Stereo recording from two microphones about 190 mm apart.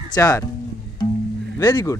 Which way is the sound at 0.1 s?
20° left (ahead or behind).